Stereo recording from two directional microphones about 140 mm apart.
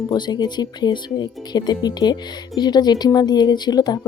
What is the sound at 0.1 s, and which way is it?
Speech, 30° left (ahead or behind).